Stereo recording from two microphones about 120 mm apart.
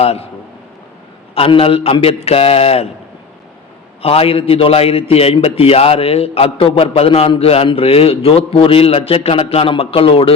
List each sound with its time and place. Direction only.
0.0 s a man's voice: 55° left (ahead or behind)
1.4 s a man's voice: 50° left (ahead or behind)
4.0 s a man's voice: 55° left (ahead or behind)